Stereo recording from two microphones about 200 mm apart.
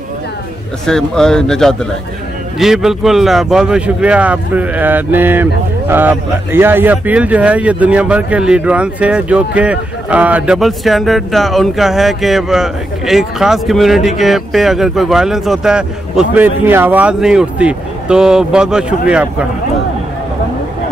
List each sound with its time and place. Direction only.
0.8 s speech: 5° left (ahead or behind)